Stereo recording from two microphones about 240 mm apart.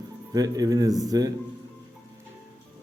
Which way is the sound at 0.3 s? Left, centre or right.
Centre.